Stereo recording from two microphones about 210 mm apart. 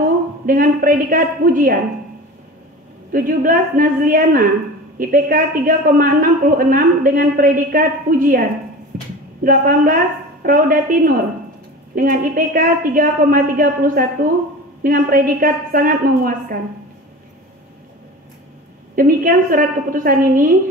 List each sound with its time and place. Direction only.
0.0 s a woman's voice: 40° right (ahead or behind)
3.1 s a woman's voice: 40° right (ahead or behind)
8.9 s a sound: 40° right (ahead or behind)
9.4 s a man's voice: 40° right (ahead or behind)
18.9 s a man's voice: 40° right (ahead or behind)